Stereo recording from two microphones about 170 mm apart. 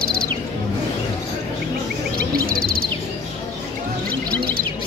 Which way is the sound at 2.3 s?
60° right (ahead or behind).